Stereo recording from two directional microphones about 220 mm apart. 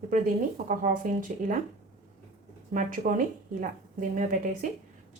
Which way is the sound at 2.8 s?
35° right (ahead or behind).